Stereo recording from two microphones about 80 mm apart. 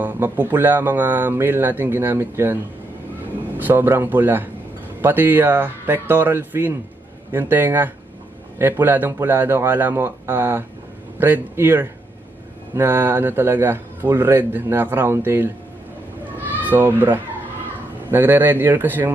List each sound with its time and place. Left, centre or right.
0.0 s a man's voice: right
3.6 s a man's voice: right
16.6 s a man's voice: right